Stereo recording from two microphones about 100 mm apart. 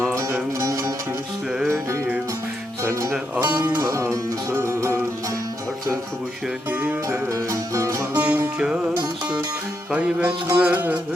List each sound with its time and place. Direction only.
0.6 s music: 35° right (ahead or behind)
3.3 s music: 15° right (ahead or behind)
3.8 s music: 25° right (ahead or behind)
7.1 s music: 35° right (ahead or behind)
8.1 s music: 15° right (ahead or behind)
9.9 s music: 15° right (ahead or behind)